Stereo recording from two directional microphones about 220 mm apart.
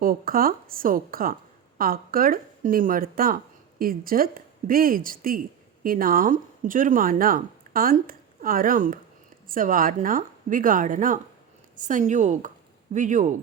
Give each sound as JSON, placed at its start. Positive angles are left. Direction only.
{"t": 0.0, "sound": "speech", "side_deg": -40}